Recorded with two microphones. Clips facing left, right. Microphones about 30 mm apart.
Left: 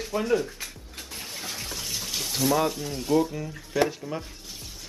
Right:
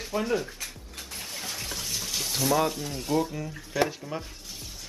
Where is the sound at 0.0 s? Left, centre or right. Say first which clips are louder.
Left 3 dB; centre.